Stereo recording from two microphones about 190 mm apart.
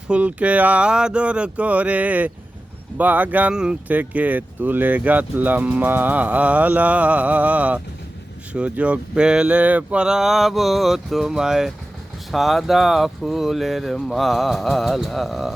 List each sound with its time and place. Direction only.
0.1 s speech: 5° right (ahead or behind)